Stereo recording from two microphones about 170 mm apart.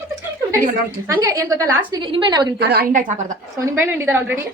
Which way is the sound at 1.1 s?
20° right (ahead or behind).